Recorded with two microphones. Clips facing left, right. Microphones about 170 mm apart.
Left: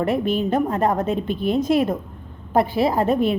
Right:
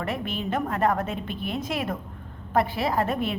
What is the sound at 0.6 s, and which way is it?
Speech, 25° left (ahead or behind).